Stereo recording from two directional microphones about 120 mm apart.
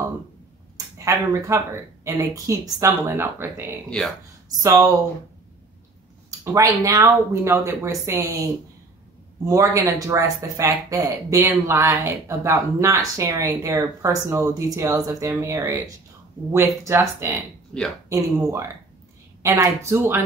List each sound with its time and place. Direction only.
0.9 s speech: 25° right (ahead or behind)
6.4 s speech: 25° right (ahead or behind)
16.8 s speech: 20° right (ahead or behind)